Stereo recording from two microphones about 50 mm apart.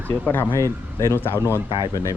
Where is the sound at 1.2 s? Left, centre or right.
Left.